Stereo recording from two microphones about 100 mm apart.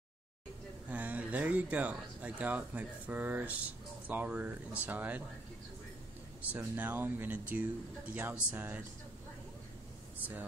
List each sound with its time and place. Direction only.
0.8 s speech: 15° right (ahead or behind)
6.5 s speech: 20° right (ahead or behind)
10.1 s speech: 15° right (ahead or behind)